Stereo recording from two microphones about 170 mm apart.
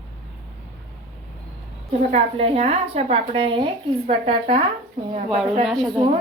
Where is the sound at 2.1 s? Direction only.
40° right (ahead or behind).